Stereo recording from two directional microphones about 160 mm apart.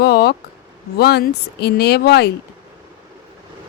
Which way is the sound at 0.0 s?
85° left.